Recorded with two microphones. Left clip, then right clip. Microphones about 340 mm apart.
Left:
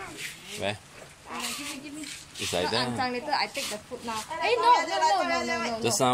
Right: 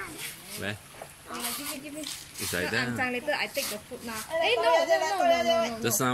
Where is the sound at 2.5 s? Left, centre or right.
Centre.